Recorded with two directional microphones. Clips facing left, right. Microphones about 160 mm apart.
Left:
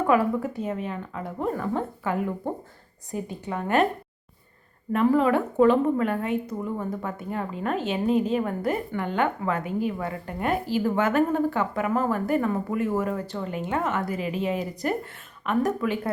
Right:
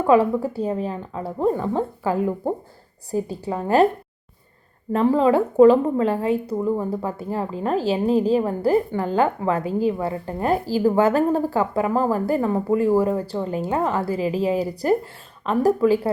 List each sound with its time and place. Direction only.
0.0 s a woman's voice: 30° right (ahead or behind)
4.9 s a woman's voice: 30° right (ahead or behind)